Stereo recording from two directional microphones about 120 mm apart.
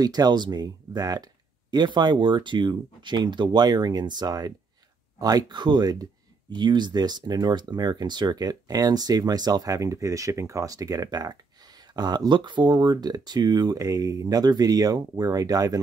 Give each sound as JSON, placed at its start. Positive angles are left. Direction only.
{"t": 0.0, "sound": "speech", "side_deg": -35}